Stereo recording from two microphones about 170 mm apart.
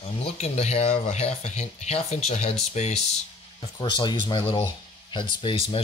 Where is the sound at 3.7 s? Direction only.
25° left (ahead or behind).